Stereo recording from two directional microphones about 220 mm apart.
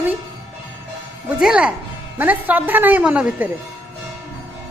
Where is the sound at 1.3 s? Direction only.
5° right (ahead or behind).